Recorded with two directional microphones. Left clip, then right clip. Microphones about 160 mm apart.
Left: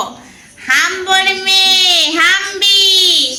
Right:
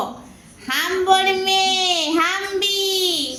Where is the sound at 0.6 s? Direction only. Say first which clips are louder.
Left 6 dB; centre (ahead or behind).